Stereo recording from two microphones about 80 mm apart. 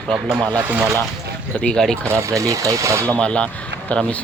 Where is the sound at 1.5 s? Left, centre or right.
Centre.